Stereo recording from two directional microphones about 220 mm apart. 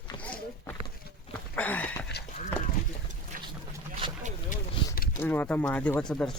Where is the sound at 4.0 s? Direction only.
35° right (ahead or behind).